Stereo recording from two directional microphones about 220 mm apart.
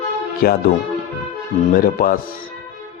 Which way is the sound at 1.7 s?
40° left (ahead or behind).